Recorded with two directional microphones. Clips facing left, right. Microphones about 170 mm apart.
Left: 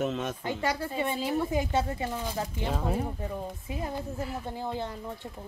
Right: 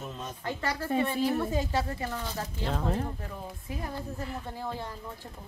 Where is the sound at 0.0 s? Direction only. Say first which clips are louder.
Left 9 dB; 75° left (ahead or behind).